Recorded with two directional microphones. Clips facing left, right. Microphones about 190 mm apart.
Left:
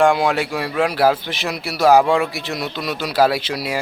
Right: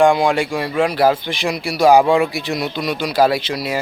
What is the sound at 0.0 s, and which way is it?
A man's voice, 5° left (ahead or behind).